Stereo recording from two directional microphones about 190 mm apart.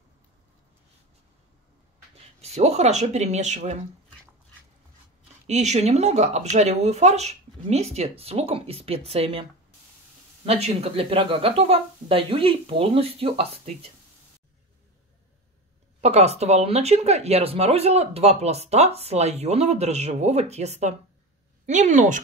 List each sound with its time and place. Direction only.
2.4 s speech: 35° right (ahead or behind)
5.5 s speech: 35° right (ahead or behind)
16.0 s speech: 35° right (ahead or behind)